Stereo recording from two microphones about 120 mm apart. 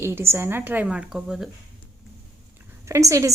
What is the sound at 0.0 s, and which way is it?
A woman's voice, 20° right (ahead or behind).